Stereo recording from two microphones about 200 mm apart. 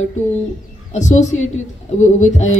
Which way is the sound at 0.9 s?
35° left (ahead or behind).